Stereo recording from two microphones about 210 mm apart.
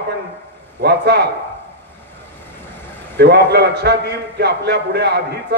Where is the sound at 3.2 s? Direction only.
50° right (ahead or behind).